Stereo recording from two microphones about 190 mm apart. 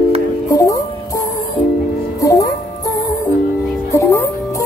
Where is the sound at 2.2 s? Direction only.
15° left (ahead or behind).